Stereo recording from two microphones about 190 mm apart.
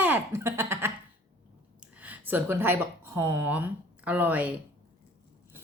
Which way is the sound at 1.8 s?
10° right (ahead or behind).